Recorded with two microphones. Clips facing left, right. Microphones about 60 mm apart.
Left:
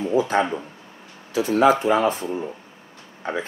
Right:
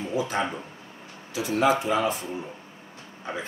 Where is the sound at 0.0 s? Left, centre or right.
Left.